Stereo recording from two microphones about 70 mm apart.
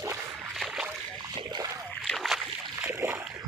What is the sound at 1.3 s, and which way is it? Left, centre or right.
Splash, right.